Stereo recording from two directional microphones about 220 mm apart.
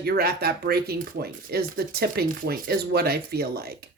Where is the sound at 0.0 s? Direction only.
45° right (ahead or behind).